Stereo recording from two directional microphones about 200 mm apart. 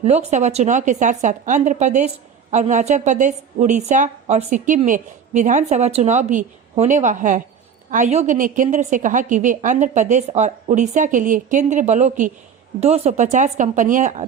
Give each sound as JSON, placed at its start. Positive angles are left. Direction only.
{"t": 0.0, "sound": "speech", "side_deg": -35}